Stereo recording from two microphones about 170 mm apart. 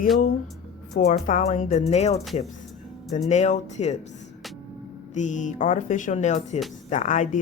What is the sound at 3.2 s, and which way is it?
Speech, 40° left (ahead or behind).